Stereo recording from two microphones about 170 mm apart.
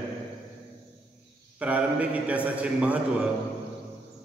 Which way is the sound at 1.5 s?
10° right (ahead or behind).